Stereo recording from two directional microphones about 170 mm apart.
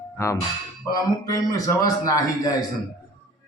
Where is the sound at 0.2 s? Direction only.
15° left (ahead or behind).